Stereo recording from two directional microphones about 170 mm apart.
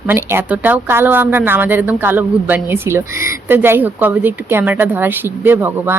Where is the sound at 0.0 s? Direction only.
15° right (ahead or behind).